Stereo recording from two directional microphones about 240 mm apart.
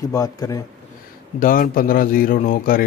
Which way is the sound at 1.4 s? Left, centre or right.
Left.